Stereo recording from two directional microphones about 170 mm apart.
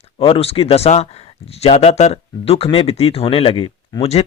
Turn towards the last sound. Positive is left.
turn(degrees=35)  # may be behind; listen again after turning